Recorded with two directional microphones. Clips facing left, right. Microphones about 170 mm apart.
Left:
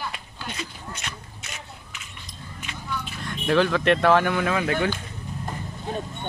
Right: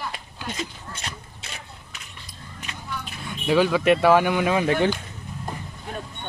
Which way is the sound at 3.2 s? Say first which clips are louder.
Right 1 dB; 5° right (ahead or behind).